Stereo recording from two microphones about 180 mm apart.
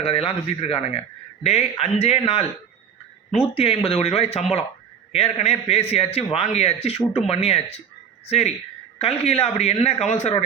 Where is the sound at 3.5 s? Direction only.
30° left (ahead or behind).